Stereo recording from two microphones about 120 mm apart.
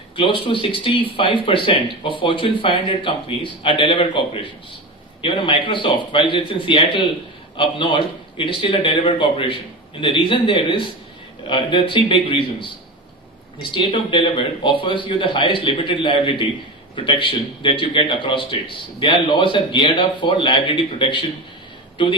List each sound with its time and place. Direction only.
0.2 s a man's voice: 45° left (ahead or behind)